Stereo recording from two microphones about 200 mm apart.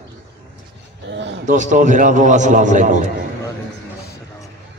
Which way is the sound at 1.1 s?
65° right (ahead or behind).